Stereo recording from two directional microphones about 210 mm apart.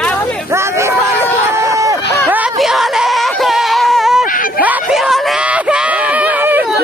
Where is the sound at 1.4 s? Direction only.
15° right (ahead or behind).